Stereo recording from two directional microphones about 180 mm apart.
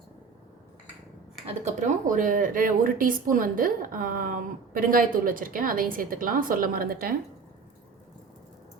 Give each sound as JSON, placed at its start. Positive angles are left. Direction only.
{"t": 1.6, "sound": "speech", "side_deg": -45}